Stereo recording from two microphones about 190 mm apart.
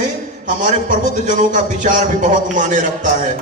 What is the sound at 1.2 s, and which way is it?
A man's voice, 40° right (ahead or behind).